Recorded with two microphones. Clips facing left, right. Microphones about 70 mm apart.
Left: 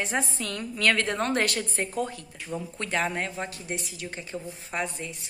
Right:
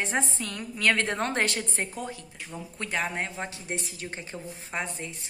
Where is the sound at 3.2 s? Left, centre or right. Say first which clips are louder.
Left 1 dB; right.